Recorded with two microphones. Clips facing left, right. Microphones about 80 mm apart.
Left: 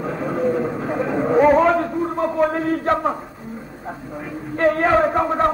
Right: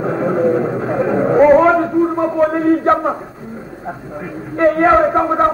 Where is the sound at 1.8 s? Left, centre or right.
Centre.